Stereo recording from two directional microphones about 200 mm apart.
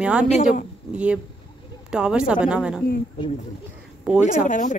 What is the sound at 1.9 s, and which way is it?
Speech, 5° right (ahead or behind).